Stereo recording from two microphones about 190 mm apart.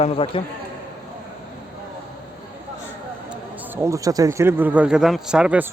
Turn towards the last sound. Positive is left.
turn(degrees=-5)  # may be behind; listen again after turning